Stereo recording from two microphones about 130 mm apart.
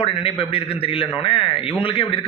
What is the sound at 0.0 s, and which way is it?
A man's voice, 45° left (ahead or behind).